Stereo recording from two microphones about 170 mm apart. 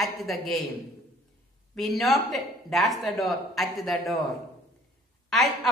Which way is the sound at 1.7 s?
Centre (ahead or behind).